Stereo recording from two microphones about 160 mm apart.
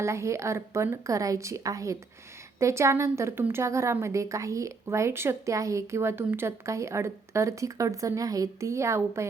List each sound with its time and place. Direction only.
0.0 s a woman's voice: 15° right (ahead or behind)